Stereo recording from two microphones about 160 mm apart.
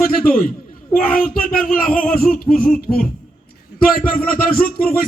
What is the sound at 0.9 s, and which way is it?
Speech, 65° left (ahead or behind).